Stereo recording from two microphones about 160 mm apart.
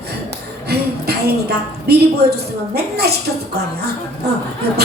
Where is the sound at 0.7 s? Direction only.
85° right.